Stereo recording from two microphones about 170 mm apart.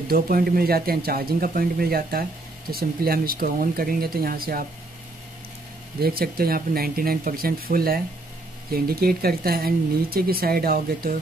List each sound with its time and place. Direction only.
0.1 s speech: 60° right (ahead or behind)
5.9 s speech: 65° right (ahead or behind)